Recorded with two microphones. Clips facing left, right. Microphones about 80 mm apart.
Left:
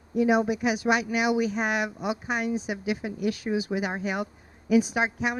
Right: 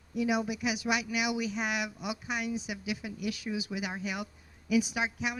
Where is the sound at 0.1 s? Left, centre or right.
Left.